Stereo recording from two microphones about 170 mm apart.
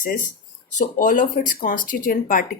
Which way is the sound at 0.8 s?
50° left (ahead or behind).